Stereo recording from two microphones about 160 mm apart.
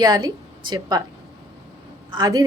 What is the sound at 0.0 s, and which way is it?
A woman's voice, 25° right (ahead or behind).